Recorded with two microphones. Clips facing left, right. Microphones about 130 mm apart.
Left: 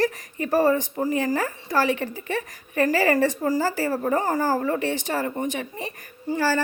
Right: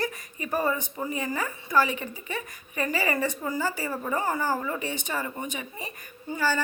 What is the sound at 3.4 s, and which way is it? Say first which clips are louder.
A woman's voice: left 6 dB; 40° left (ahead or behind).